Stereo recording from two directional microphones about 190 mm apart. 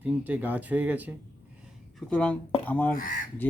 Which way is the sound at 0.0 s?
10° right (ahead or behind).